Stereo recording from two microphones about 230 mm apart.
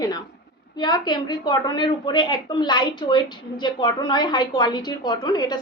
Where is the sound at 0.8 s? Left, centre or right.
Centre.